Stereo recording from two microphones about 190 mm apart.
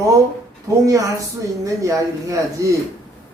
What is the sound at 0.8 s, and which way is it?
A man's voice, 15° right (ahead or behind).